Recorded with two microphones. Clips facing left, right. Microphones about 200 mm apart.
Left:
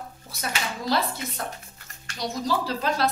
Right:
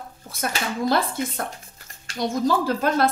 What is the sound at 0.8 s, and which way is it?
A woman's voice, 50° right (ahead or behind).